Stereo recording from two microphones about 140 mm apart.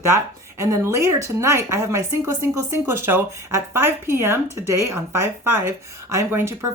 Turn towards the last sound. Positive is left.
turn(degrees=-15)  # may be behind; listen again after turning